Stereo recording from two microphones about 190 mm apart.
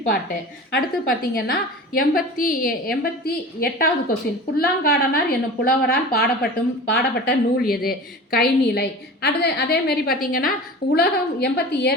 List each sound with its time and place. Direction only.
0.7 s a woman's voice: 50° left (ahead or behind)